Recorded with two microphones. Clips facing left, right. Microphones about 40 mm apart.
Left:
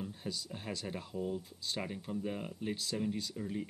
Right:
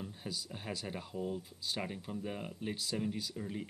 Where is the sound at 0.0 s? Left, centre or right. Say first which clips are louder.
Left 2 dB; centre.